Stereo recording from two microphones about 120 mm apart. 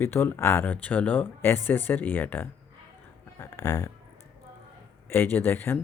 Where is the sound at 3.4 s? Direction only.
25° left (ahead or behind).